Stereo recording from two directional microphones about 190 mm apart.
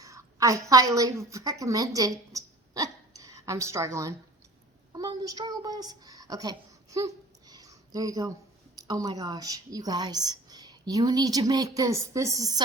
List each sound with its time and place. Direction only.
0.0 s a woman's voice: 15° right (ahead or behind)